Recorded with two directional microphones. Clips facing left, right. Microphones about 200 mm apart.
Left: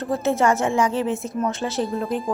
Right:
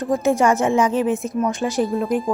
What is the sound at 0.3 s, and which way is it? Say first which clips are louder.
Speech: right 2 dB; 15° right (ahead or behind).